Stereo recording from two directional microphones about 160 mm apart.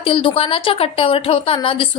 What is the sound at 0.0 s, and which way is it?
A woman's voice, 35° left (ahead or behind).